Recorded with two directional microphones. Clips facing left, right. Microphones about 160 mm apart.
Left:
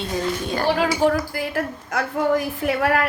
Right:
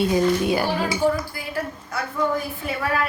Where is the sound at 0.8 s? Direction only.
80° left.